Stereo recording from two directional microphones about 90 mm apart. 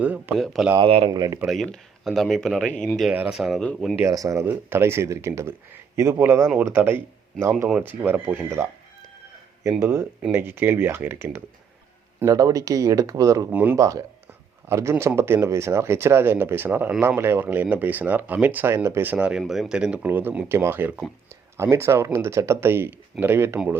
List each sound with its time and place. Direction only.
0.0 s speech: 20° right (ahead or behind)
0.3 s speech: centre (ahead or behind)
0.8 s speech: 80° right
1.1 s speech: 45° right (ahead or behind)
1.5 s speech: centre (ahead or behind)
3.1 s speech: 10° right (ahead or behind)
4.0 s speech: 40° right (ahead or behind)
4.4 s speech: 25° right (ahead or behind)
9.6 s speech: 30° right (ahead or behind)
12.2 s speech: 40° right (ahead or behind)
13.5 s speech: 20° right (ahead or behind)
13.7 s speech: 40° right (ahead or behind)
19.1 s speech: 15° right (ahead or behind)